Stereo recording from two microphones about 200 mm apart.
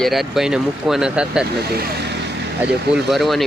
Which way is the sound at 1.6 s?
50° right (ahead or behind).